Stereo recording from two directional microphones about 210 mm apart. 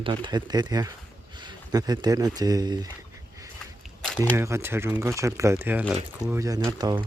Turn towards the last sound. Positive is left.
turn(degrees=-20)  # may be behind; listen again after turning